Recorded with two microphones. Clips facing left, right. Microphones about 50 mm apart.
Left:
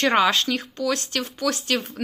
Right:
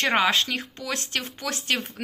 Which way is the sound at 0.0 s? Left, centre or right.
Centre.